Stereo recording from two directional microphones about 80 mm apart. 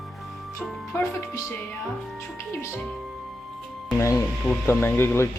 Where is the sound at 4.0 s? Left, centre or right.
Left.